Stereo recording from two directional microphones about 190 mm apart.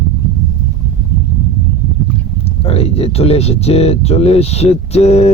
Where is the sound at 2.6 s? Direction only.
30° left (ahead or behind).